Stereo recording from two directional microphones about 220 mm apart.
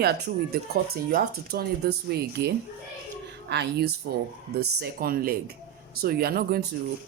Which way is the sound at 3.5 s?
50° right (ahead or behind).